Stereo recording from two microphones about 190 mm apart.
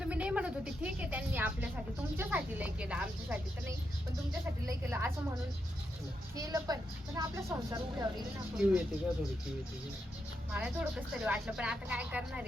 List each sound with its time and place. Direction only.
0.0 s a sound: 5° right (ahead or behind)
4.3 s speech: 15° right (ahead or behind)
6.3 s speech: 20° right (ahead or behind)
8.5 s speech: 5° right (ahead or behind)
10.5 s speech: 5° right (ahead or behind)